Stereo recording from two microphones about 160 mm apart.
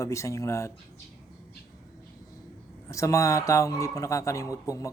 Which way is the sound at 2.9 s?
20° left (ahead or behind).